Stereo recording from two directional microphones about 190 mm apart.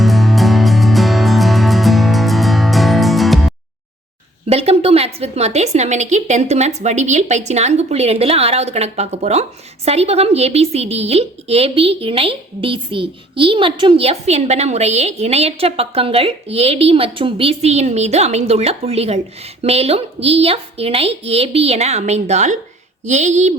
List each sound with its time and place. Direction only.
0.0 s music: centre (ahead or behind)
4.4 s a woman's voice: 35° right (ahead or behind)